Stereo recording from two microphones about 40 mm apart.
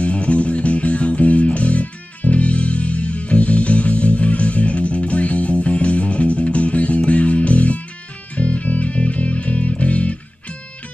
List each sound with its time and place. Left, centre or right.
0.0 s music: left